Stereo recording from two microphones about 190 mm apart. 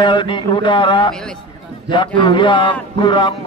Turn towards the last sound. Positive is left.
turn(degrees=25)  # may be behind; listen again after turning